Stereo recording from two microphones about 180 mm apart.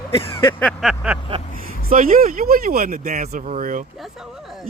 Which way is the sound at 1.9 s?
50° right (ahead or behind).